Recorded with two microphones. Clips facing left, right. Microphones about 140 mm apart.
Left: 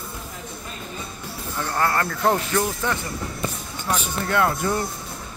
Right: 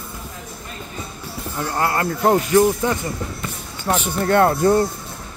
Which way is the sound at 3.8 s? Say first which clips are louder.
Right 6 dB; 45° right (ahead or behind).